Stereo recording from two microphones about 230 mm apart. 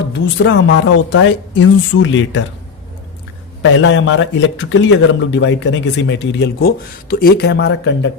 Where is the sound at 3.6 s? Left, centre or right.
Left.